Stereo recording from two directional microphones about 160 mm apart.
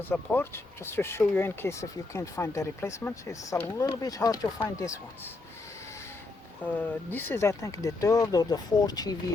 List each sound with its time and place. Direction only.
0.0 s speech: 15° left (ahead or behind)
6.6 s speech: 10° left (ahead or behind)